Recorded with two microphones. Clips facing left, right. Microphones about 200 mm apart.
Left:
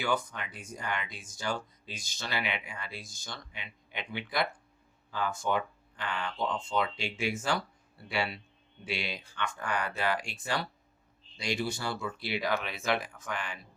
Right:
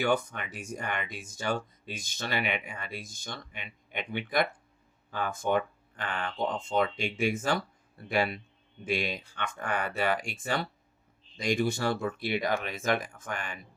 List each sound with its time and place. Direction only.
0.0 s speech: 60° right (ahead or behind)